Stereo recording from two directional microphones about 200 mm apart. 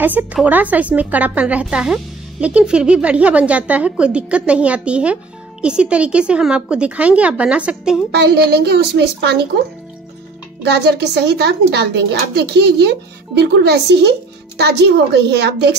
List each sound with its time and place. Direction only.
0.0 s a woman's voice: 10° right (ahead or behind)
8.1 s a woman's voice: 55° right (ahead or behind)
10.6 s a woman's voice: 55° right (ahead or behind)